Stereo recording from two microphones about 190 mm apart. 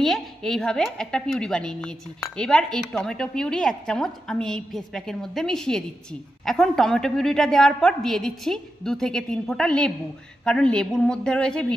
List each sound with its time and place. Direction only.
0.0 s a woman's voice: centre (ahead or behind)